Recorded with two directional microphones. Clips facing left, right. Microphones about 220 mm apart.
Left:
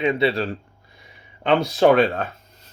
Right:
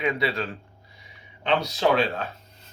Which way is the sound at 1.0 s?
50° left (ahead or behind).